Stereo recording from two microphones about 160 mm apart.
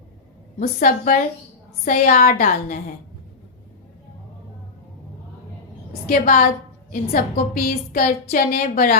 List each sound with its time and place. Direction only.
0.6 s a woman's voice: 60° left (ahead or behind)
6.1 s a woman's voice: 60° left (ahead or behind)